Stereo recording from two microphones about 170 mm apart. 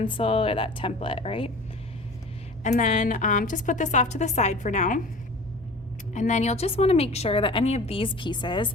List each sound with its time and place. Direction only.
0.0 s a woman's voice: 30° left (ahead or behind)
2.6 s a woman's voice: 50° left (ahead or behind)
6.1 s a woman's voice: 45° left (ahead or behind); by 8.7 s 25° left (ahead or behind)